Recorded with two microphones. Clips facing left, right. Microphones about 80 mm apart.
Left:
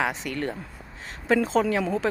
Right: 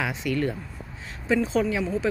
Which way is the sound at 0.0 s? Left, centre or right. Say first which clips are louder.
Right 1 dB; left.